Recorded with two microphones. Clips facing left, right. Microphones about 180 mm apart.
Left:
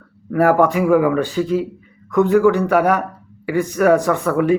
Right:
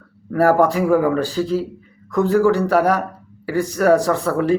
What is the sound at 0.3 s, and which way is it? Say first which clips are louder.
A man's voice: left 1 dB; 35° right (ahead or behind).